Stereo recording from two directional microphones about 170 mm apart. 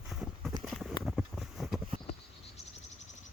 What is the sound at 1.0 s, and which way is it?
Vehicle, centre (ahead or behind).